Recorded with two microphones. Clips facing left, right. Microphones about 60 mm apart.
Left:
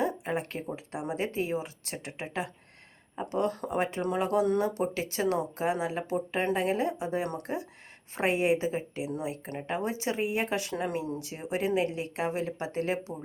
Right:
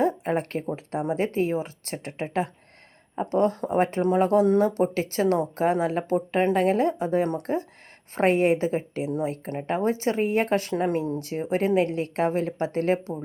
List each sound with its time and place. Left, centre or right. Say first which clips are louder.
0.0 s a woman's voice: right 6 dB; right